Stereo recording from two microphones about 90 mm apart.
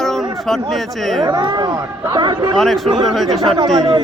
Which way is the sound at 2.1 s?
60° right (ahead or behind).